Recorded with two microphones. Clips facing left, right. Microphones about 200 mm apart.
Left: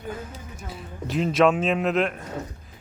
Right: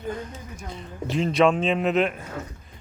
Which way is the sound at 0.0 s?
5° left (ahead or behind).